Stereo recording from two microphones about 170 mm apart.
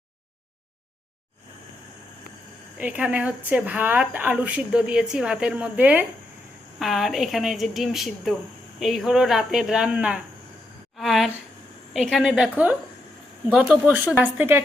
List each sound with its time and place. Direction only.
2.7 s a woman's voice: 5° right (ahead or behind)